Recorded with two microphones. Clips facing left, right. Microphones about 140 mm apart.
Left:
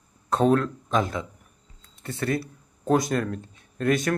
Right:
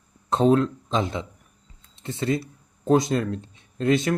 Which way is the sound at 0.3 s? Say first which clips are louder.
Right 2 dB; 25° right (ahead or behind).